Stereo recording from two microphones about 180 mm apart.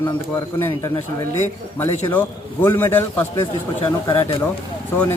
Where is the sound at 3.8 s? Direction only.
25° left (ahead or behind).